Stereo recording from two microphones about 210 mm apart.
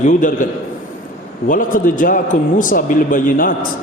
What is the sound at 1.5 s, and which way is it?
Speech, 40° left (ahead or behind).